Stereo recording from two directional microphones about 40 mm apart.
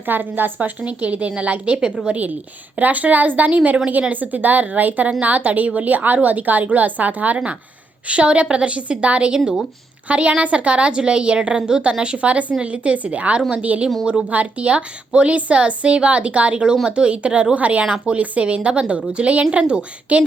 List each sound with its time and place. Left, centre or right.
0.0 s a woman's voice: right
0.8 s a woman's voice: right
8.0 s a woman's voice: right
14.3 s a woman's voice: right